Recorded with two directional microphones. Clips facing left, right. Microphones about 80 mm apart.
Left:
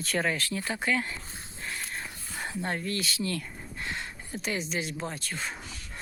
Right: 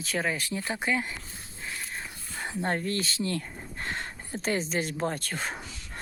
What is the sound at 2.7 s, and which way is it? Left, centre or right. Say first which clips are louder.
Speech: right 4 dB; right.